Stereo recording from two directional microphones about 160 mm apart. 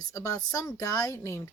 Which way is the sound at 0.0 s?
20° left (ahead or behind).